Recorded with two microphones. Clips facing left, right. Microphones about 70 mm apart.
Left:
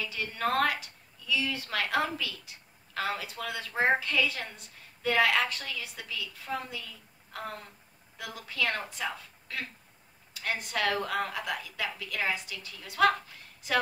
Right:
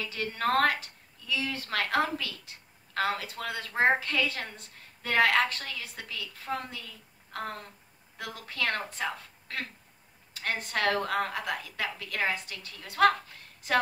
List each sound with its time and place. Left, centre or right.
0.0 s a woman's voice: right
8.2 s a woman's voice: right